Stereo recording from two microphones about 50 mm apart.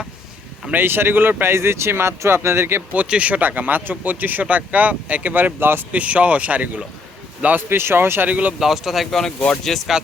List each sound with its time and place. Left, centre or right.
0.7 s speech: right
3.1 s speech: right
3.4 s speech: right
5.9 s speech: right
7.7 s speech: right
8.3 s speech: right
8.5 s speech: centre